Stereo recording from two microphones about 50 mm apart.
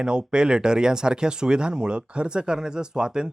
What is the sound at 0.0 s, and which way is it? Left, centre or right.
Speech, centre.